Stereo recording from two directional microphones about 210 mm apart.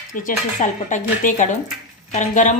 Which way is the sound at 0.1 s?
40° left (ahead or behind).